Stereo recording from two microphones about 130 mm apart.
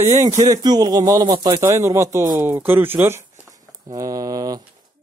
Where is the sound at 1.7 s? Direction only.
20° right (ahead or behind).